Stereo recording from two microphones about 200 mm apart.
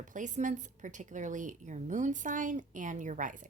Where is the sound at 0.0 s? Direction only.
40° right (ahead or behind).